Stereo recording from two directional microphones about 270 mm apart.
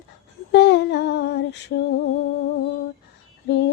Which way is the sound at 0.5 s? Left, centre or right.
Left.